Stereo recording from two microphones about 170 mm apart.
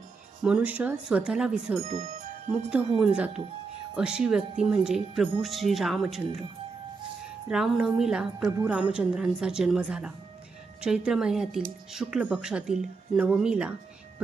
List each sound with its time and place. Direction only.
0.4 s speech: 5° right (ahead or behind)
1.8 s speech: 40° right (ahead or behind)
3.0 s speech: 5° right (ahead or behind)
7.5 s speech: 5° right (ahead or behind)